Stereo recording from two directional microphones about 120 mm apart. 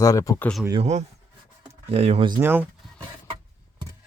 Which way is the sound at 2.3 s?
15° right (ahead or behind).